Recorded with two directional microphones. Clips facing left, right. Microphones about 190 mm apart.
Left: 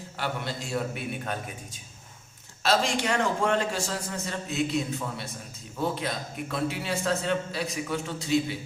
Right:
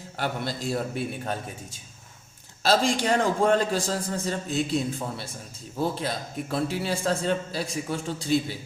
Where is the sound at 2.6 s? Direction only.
35° right (ahead or behind).